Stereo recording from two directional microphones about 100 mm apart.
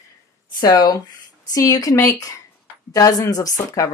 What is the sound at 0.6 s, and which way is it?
Speech, 40° left (ahead or behind).